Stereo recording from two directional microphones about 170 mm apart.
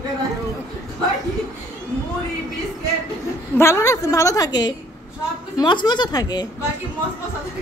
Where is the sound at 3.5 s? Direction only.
15° left (ahead or behind).